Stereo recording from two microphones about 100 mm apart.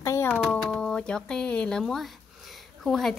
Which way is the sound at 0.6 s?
5° left (ahead or behind).